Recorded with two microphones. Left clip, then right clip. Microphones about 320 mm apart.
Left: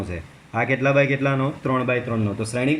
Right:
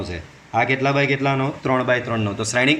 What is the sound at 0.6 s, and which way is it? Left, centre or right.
Speech, centre.